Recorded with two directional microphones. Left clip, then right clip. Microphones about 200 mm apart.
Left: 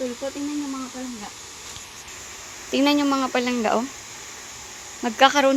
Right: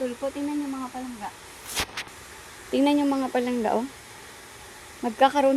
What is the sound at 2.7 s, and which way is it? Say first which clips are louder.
Speech: left 2 dB; 5° right (ahead or behind).